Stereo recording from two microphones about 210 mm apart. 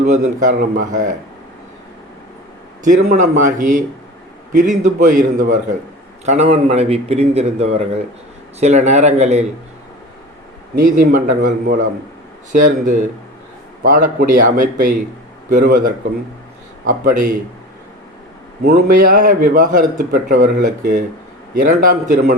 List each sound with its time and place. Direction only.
0.0 s a man's voice: 35° right (ahead or behind)
2.8 s a man's voice: 35° right (ahead or behind)
10.8 s a man's voice: 40° right (ahead or behind)
18.6 s a man's voice: 45° right (ahead or behind)